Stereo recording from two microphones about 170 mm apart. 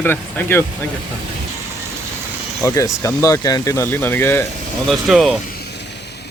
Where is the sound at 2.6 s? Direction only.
20° left (ahead or behind).